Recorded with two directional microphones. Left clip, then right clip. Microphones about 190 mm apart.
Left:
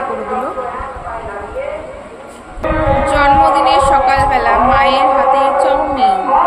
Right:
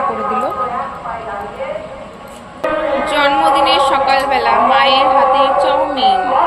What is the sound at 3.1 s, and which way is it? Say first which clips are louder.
A woman's voice: left 2 dB; 20° left (ahead or behind).